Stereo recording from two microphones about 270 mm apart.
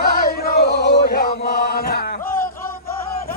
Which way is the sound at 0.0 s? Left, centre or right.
Left.